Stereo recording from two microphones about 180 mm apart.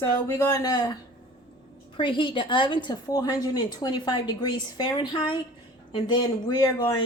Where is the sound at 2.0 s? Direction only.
25° left (ahead or behind).